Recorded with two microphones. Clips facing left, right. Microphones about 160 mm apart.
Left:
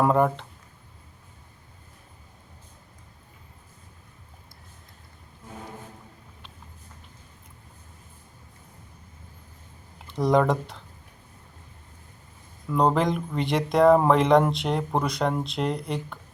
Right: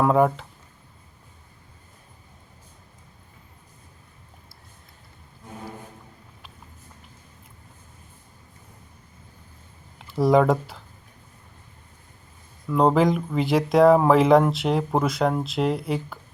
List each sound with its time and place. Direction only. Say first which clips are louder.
0.0 s speech: right 2 dB; centre (ahead or behind)
10.1 s speech: right 3 dB; 5° right (ahead or behind)
12.6 s speech: right 3 dB; centre (ahead or behind)